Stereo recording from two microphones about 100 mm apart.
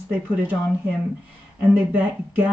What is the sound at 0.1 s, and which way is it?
Speech, 15° right (ahead or behind).